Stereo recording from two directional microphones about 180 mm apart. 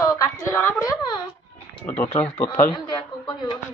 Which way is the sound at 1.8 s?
10° left (ahead or behind).